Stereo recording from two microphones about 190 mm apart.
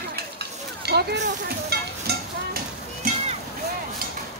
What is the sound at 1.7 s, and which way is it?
Stir, 60° right (ahead or behind).